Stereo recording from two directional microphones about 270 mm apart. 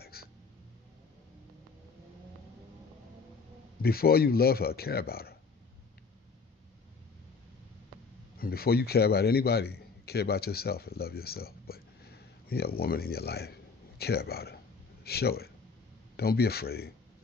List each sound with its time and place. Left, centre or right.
0.0 s hiccup: left
3.8 s speech: left
8.4 s a man's voice: left